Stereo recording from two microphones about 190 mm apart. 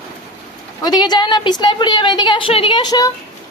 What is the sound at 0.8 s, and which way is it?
A woman's voice, 20° left (ahead or behind).